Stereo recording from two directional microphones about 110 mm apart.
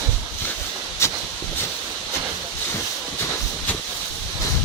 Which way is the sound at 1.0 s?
25° left (ahead or behind).